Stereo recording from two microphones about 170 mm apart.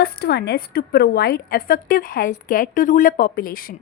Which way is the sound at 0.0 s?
65° left (ahead or behind).